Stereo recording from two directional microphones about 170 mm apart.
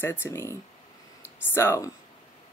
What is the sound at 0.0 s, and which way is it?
Speech, 10° left (ahead or behind).